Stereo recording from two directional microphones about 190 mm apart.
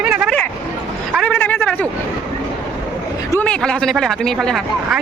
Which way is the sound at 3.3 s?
5° left (ahead or behind).